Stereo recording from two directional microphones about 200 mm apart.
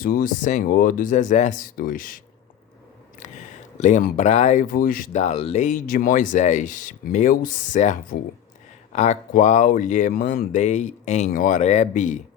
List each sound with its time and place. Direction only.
0.0 s speech: 45° left (ahead or behind)
3.8 s speech: 35° left (ahead or behind)